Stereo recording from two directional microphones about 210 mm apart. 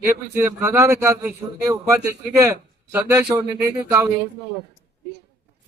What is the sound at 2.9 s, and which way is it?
A man's voice, 10° right (ahead or behind).